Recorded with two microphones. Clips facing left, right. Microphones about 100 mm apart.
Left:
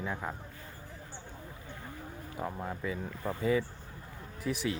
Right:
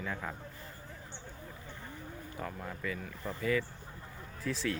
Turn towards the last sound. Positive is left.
turn(degrees=15)  # may be behind; listen again after turning